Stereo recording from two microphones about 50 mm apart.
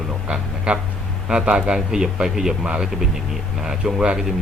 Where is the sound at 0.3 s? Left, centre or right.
Right.